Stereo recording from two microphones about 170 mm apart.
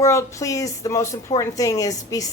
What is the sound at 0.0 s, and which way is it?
Speech, 15° left (ahead or behind).